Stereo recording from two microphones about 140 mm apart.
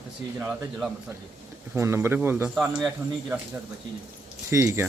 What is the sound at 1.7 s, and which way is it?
Speech, 20° right (ahead or behind).